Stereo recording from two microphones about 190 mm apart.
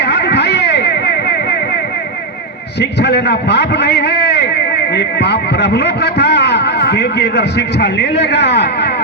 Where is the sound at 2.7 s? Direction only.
65° left (ahead or behind).